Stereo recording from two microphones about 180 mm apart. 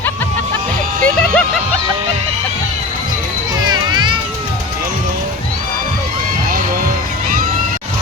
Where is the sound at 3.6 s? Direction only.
25° right (ahead or behind).